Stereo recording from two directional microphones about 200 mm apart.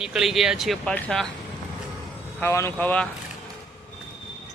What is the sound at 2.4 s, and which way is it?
Speech, 15° left (ahead or behind).